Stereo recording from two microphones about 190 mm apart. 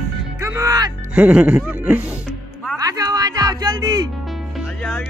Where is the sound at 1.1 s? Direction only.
5° right (ahead or behind).